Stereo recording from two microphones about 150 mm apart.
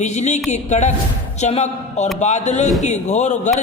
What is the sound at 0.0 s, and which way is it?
A man's voice, 50° left (ahead or behind).